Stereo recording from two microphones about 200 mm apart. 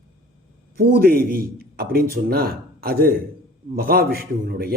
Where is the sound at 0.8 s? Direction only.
50° right (ahead or behind).